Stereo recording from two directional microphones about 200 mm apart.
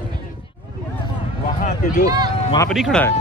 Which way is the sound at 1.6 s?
45° left (ahead or behind).